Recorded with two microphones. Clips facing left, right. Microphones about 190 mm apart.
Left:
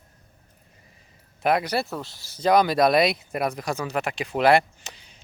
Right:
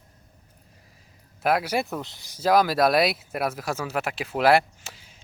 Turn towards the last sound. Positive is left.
turn(degrees=-5)  # may be behind; listen again after turning